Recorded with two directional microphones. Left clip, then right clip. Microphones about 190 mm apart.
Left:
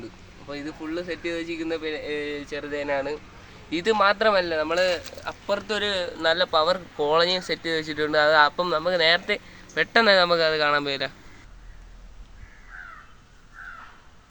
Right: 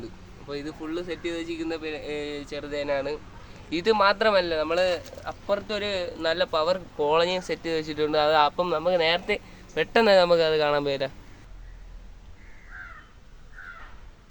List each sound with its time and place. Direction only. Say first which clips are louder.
0.4 s speech: even; 20° left (ahead or behind); by 10.4 s 20° right (ahead or behind)